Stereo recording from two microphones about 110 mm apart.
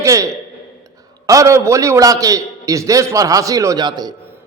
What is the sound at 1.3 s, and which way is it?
A man's voice, 30° right (ahead or behind).